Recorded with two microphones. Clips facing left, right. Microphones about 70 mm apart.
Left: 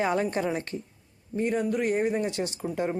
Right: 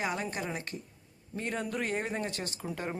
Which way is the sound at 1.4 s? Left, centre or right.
Centre.